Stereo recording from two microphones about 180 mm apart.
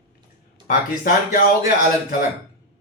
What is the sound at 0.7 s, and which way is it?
Speech, 55° left (ahead or behind).